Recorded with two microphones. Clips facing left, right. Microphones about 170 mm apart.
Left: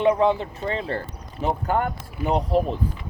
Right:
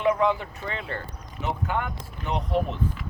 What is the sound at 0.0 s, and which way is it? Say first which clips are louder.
Speech: left 4 dB; 30° left (ahead or behind).